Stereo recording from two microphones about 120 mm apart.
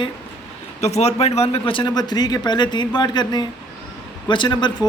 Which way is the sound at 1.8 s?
35° left (ahead or behind).